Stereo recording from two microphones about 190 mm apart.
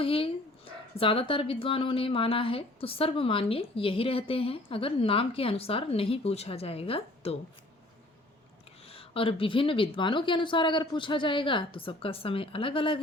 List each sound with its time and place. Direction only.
0.0 s speech: 30° left (ahead or behind)
8.9 s speech: 30° left (ahead or behind)